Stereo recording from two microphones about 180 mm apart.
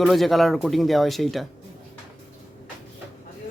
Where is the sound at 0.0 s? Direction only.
Centre (ahead or behind).